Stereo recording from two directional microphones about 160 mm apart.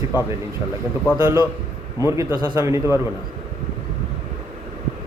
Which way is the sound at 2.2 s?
25° right (ahead or behind).